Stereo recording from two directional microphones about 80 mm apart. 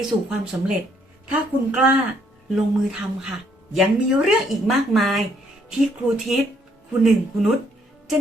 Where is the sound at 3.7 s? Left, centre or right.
Centre.